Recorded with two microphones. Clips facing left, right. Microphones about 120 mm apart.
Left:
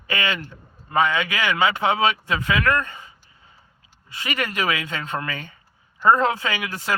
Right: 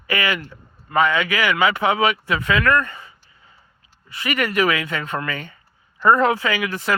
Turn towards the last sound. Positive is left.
turn(degrees=20)  # may be behind; listen again after turning